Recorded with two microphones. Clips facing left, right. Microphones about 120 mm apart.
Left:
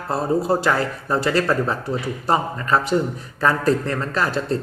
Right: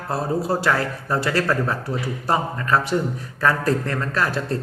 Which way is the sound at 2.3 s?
25° left (ahead or behind).